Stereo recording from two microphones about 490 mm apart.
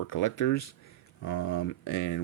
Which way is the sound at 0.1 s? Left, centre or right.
Left.